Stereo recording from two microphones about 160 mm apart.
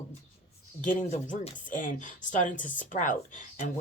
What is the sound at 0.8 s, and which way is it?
Speech, 50° left (ahead or behind).